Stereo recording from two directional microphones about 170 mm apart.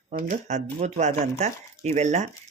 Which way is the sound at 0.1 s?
45° right (ahead or behind).